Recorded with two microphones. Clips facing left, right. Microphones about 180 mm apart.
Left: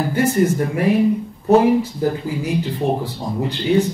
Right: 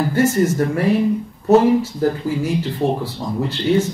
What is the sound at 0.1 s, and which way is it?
Speech, 15° left (ahead or behind).